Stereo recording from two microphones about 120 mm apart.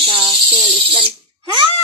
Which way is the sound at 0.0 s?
45° right (ahead or behind).